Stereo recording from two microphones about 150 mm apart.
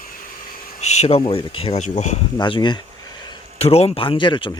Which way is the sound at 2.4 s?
30° left (ahead or behind).